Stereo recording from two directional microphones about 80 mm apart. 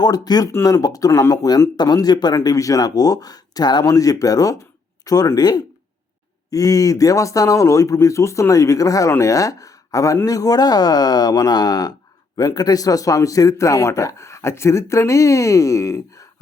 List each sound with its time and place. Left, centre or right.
0.0 s speech: left
1.2 s speech: left
1.7 s speech: left
3.8 s speech: left
6.5 s speech: left